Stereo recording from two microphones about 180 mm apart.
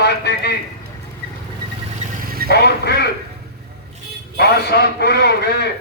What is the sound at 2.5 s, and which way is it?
Speech, 65° left (ahead or behind).